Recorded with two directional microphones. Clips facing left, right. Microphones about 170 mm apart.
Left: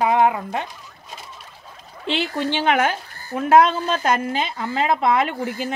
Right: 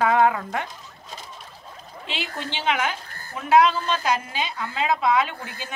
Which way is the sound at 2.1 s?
50° left (ahead or behind).